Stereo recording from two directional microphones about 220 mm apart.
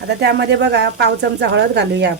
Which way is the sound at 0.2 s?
50° right (ahead or behind).